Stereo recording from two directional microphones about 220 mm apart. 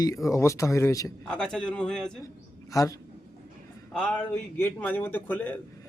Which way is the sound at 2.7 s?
15° left (ahead or behind).